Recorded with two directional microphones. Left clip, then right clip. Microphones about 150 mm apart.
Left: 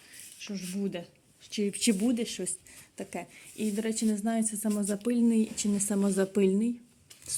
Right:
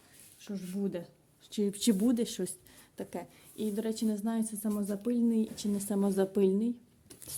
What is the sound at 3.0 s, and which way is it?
A woman's voice, 5° right (ahead or behind).